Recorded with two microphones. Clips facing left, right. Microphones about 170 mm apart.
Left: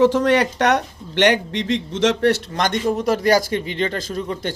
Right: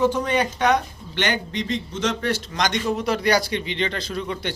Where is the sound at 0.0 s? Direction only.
90° left.